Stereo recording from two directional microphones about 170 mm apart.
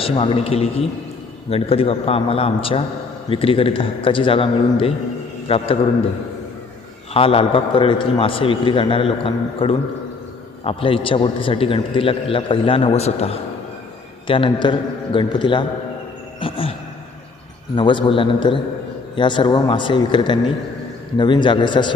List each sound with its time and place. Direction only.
0.0 s a man's voice: 30° left (ahead or behind)
7.1 s a man's voice: 35° left (ahead or behind)
17.7 s a man's voice: 30° left (ahead or behind)